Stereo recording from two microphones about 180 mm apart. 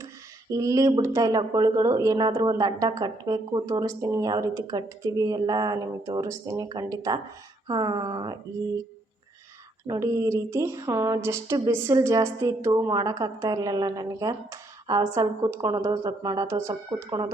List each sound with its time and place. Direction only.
0.5 s speech: 20° right (ahead or behind)
9.8 s speech: 15° right (ahead or behind)